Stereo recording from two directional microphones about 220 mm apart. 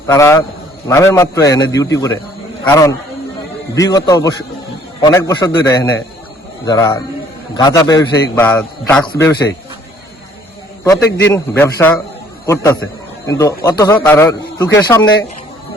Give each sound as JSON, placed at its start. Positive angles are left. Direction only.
{"t": 0.1, "sound": "a man's voice", "side_deg": 10}
{"t": 10.8, "sound": "a man's voice", "side_deg": 15}
{"t": 13.2, "sound": "a man's voice", "side_deg": 15}